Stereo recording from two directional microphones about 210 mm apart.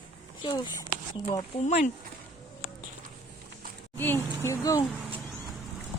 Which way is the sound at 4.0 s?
10° left (ahead or behind).